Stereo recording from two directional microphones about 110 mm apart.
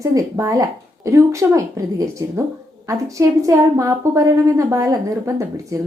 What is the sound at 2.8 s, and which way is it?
A woman's voice, 30° right (ahead or behind).